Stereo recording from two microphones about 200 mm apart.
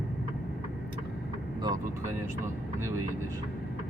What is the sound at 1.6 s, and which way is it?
Speech, 20° right (ahead or behind).